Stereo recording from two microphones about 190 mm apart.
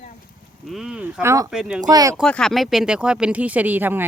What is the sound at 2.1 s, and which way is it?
Speech, 5° left (ahead or behind).